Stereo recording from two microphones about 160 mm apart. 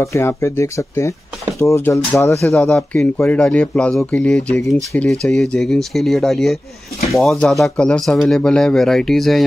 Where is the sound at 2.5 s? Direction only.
5° left (ahead or behind).